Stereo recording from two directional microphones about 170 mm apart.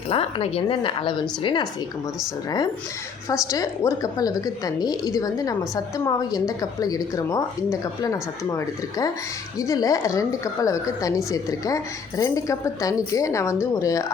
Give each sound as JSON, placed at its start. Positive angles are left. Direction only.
{"t": 0.1, "sound": "a woman's voice", "side_deg": 35}
{"t": 3.2, "sound": "a woman's voice", "side_deg": 20}